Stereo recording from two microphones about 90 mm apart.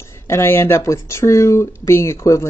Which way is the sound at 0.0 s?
30° left (ahead or behind).